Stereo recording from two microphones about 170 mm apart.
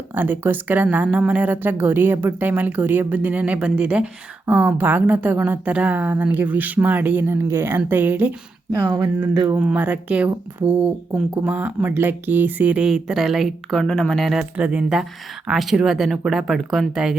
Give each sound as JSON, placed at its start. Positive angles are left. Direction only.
{"t": 0.1, "sound": "a woman's voice", "side_deg": -10}
{"t": 8.8, "sound": "speech", "side_deg": -25}
{"t": 9.5, "sound": "a woman's voice", "side_deg": -10}